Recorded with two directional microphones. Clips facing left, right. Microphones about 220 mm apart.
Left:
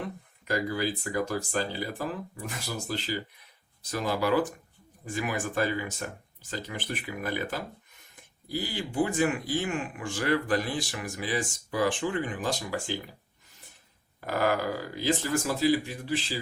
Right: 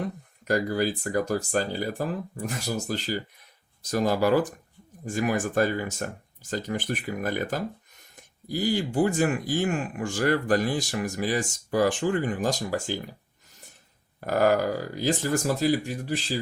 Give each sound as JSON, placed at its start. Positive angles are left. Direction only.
{"t": 0.4, "sound": "speech", "side_deg": -45}
{"t": 14.2, "sound": "speech", "side_deg": -45}